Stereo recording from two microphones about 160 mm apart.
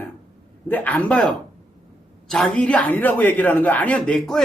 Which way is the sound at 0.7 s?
10° left (ahead or behind).